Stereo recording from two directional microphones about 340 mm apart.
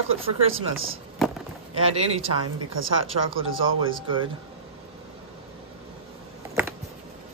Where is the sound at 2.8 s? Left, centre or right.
Right.